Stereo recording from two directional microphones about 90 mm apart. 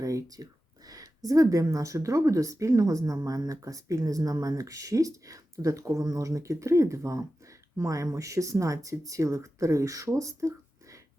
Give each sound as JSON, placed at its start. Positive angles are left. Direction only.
{"t": 0.0, "sound": "speech", "side_deg": -35}